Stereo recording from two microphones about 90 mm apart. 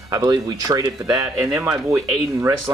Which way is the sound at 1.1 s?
30° right (ahead or behind).